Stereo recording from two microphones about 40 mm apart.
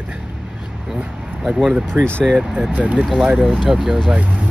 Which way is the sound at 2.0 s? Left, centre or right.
Left.